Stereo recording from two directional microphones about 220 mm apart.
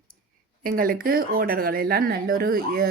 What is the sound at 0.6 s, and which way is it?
Speech, 40° right (ahead or behind).